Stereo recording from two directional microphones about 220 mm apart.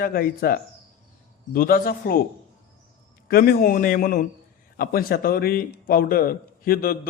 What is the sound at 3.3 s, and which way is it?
Speech, 45° left (ahead or behind).